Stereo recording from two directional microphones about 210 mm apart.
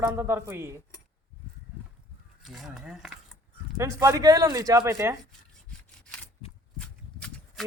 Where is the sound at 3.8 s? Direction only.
15° right (ahead or behind).